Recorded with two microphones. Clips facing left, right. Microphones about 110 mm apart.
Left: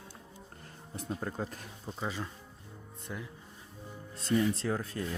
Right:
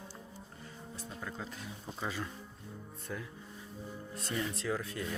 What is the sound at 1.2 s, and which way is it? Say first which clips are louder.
Speech: left 2 dB; 45° left (ahead or behind).